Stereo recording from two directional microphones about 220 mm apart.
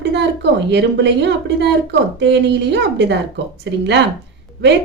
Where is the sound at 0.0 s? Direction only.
50° right (ahead or behind).